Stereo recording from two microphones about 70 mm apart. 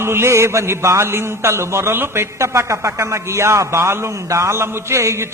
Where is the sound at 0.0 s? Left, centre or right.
Right.